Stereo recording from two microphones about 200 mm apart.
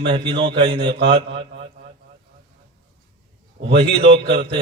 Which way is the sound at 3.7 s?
30° right (ahead or behind).